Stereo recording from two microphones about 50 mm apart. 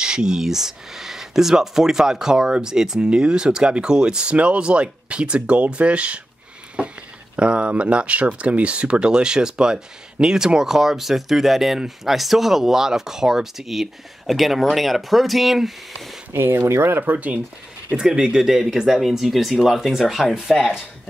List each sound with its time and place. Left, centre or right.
0.0 s speech: centre
7.3 s speech: right; by 16.0 s centre
16.6 s speech: right
17.0 s speech: right
17.9 s speech: centre